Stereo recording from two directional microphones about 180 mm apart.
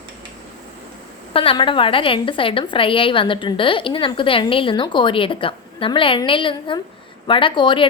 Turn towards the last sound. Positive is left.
turn(degrees=25)  # may be behind; listen again after turning